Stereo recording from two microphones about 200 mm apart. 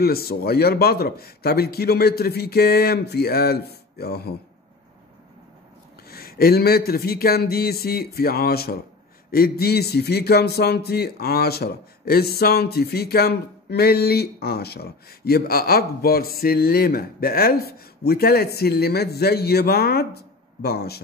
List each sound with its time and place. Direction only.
0.0 s speech: 50° left (ahead or behind)
6.0 s speech: 50° left (ahead or behind)